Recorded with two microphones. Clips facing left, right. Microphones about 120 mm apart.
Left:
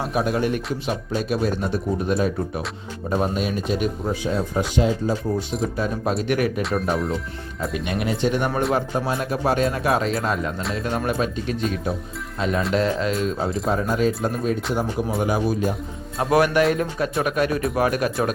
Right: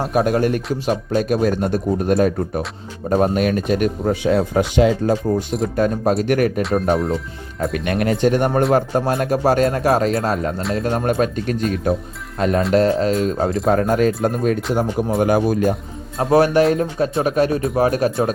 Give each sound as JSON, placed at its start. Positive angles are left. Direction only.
{"t": 0.1, "sound": "speech", "side_deg": -50}
{"t": 4.2, "sound": "speech", "side_deg": -75}
{"t": 5.7, "sound": "speech", "side_deg": -55}
{"t": 6.6, "sound": "speech", "side_deg": 0}
{"t": 7.6, "sound": "speech", "side_deg": -55}
{"t": 16.3, "sound": "speech", "side_deg": -30}